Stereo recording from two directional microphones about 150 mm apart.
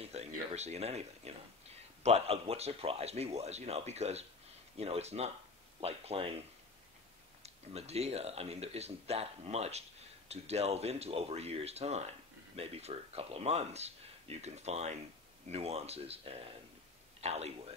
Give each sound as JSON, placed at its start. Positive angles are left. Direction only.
{"t": 0.0, "sound": "speech", "side_deg": -45}
{"t": 7.4, "sound": "speech", "side_deg": -45}